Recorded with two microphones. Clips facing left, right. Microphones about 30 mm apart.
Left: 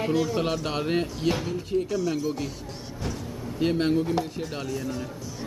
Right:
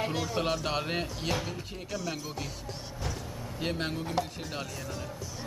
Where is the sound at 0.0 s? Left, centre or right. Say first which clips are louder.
Left 6 dB; centre.